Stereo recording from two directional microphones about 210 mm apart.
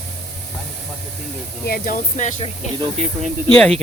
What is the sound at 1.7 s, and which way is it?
Speech, 45° left (ahead or behind).